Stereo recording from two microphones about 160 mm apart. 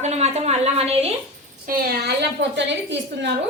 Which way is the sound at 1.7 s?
70° right (ahead or behind).